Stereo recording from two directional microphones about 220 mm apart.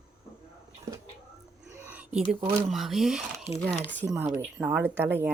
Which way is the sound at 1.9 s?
5° right (ahead or behind).